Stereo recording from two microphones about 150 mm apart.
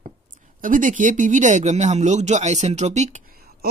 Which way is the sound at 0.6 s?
60° right (ahead or behind).